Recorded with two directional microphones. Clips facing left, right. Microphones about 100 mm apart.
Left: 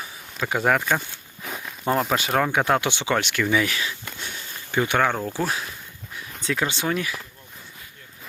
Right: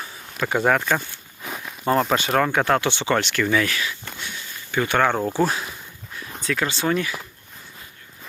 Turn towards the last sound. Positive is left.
turn(degrees=0)  # may be behind; listen again after turning